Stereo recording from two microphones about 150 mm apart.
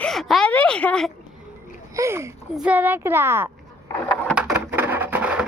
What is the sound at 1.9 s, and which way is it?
A child's voice, 20° right (ahead or behind).